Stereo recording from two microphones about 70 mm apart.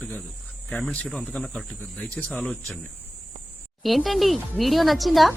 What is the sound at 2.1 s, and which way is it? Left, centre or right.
Speech, left.